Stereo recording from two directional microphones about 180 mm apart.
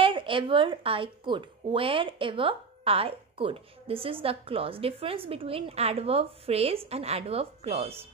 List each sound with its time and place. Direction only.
0.0 s a woman's voice: 30° right (ahead or behind)